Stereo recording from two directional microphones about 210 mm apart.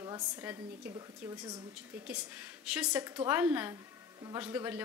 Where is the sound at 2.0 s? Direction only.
5° right (ahead or behind).